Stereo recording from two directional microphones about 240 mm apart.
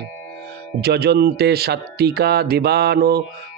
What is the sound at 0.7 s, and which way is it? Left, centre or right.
Speech, right.